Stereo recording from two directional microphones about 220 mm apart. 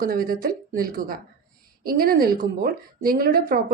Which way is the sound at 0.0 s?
40° right (ahead or behind).